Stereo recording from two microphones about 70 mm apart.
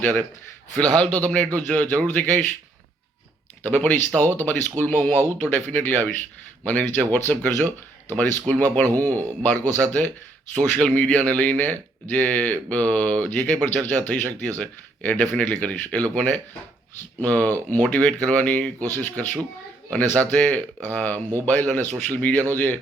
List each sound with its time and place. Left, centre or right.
0.0 s speech: left
3.7 s speech: left
21.2 s speech: right
21.4 s speech: left